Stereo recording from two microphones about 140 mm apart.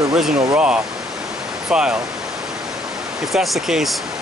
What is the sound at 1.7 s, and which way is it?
Speech, 5° right (ahead or behind).